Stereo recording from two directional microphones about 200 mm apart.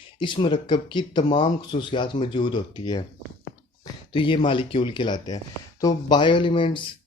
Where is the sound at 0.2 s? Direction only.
25° left (ahead or behind).